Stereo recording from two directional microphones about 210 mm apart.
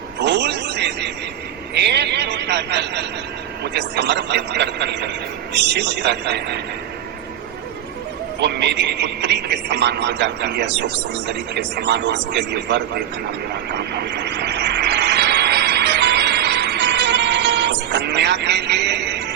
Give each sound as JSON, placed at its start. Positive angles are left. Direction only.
{"t": 0.2, "sound": "music", "side_deg": -55}
{"t": 1.7, "sound": "a man's voice", "side_deg": -50}
{"t": 8.4, "sound": "speech", "side_deg": -55}
{"t": 13.5, "sound": "vehicle", "side_deg": -50}